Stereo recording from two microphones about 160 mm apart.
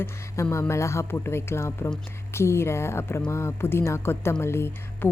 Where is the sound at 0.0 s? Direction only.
15° left (ahead or behind).